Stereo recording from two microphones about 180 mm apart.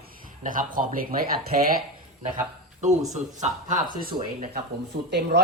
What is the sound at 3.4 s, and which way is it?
Speech, 45° right (ahead or behind).